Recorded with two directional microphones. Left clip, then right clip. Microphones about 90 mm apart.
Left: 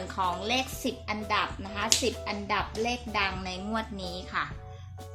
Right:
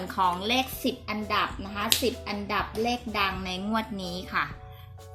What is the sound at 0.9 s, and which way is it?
Speech, 10° right (ahead or behind).